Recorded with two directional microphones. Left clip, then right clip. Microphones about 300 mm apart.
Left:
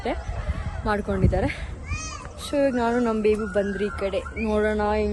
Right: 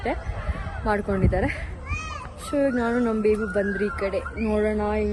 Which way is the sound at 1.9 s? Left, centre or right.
Right.